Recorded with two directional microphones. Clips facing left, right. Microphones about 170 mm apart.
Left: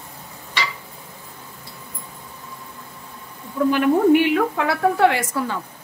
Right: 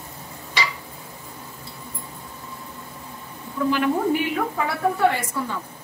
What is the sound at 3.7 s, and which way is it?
A woman's voice, 65° left (ahead or behind).